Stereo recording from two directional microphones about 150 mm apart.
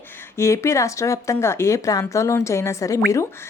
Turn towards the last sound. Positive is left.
turn(degrees=20)  # may be behind; listen again after turning